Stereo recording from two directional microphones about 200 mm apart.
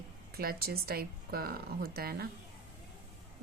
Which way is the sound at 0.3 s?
50° right (ahead or behind).